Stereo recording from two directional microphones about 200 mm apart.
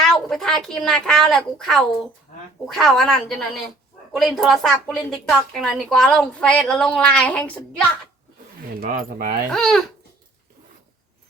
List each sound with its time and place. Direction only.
0.0 s a woman's voice: centre (ahead or behind)
8.8 s speech: 45° right (ahead or behind)
9.5 s a woman's voice: centre (ahead or behind)